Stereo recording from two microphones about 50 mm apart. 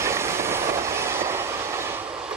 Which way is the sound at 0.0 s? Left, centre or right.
Right.